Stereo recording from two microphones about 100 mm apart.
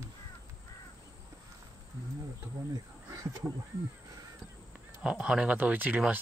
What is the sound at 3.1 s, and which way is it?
Speech, 35° right (ahead or behind).